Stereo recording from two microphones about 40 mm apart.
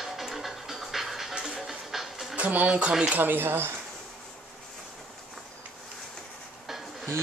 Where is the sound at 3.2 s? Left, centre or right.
Right.